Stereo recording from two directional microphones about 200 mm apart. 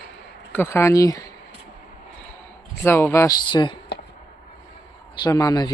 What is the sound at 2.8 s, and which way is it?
Speech, 15° left (ahead or behind).